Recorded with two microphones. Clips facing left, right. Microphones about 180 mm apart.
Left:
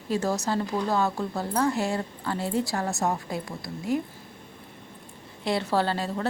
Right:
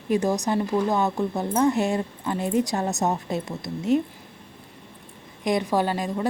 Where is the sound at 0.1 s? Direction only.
15° right (ahead or behind).